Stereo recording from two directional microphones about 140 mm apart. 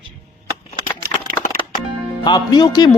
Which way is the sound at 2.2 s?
30° left (ahead or behind).